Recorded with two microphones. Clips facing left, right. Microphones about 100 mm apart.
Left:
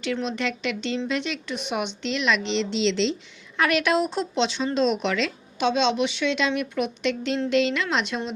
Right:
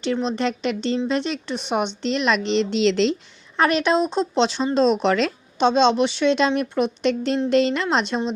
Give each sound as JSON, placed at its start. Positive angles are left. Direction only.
{"t": 0.0, "sound": "a woman's voice", "side_deg": -30}
{"t": 3.6, "sound": "a woman's voice", "side_deg": -30}
{"t": 4.4, "sound": "speech", "side_deg": -40}